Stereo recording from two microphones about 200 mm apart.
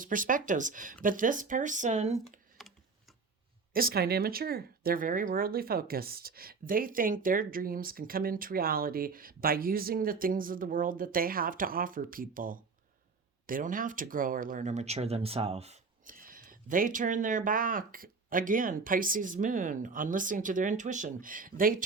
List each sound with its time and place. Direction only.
0.0 s speech: 40° right (ahead or behind)
2.6 s typing: centre (ahead or behind)
3.7 s speech: 45° right (ahead or behind)